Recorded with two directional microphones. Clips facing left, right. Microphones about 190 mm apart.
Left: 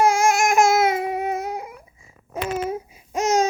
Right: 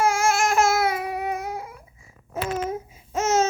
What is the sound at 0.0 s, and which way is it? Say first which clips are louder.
Babbling: left 3 dB; 15° left (ahead or behind).